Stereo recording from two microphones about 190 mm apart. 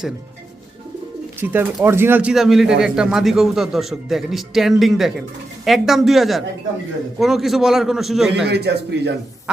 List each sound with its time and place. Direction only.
1.4 s speech: 10° right (ahead or behind)
8.4 s a man's voice: 60° right (ahead or behind)